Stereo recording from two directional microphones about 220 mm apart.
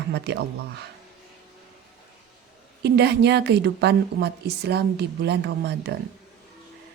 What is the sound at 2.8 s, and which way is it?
A woman's voice, 50° right (ahead or behind).